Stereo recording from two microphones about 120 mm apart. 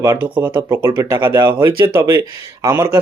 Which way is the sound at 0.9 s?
40° right (ahead or behind).